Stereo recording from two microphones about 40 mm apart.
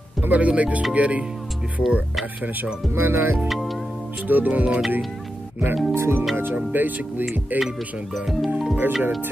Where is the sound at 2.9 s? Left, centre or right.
Right.